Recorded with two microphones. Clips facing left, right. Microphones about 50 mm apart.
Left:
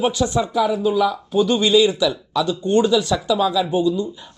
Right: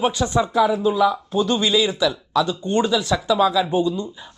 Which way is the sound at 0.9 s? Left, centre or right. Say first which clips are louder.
Even; centre.